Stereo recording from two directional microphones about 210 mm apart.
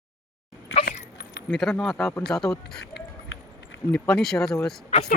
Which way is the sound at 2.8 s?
50° left (ahead or behind).